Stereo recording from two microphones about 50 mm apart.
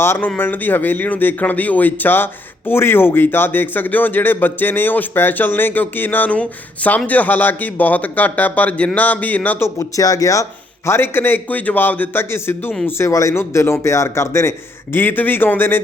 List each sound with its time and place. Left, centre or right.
0.3 s speech: left
6.3 s speech: left
9.6 s speech: left
10.8 s speech: left
11.4 s speech: left
12.3 s speech: left
13.0 s speech: left
13.4 s speech: left
14.9 s speech: left